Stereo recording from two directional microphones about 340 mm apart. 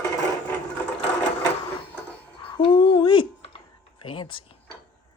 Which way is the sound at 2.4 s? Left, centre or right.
Centre.